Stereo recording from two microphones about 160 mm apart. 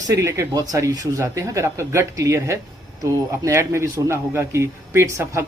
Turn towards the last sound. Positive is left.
turn(degrees=-15)  # may be behind; listen again after turning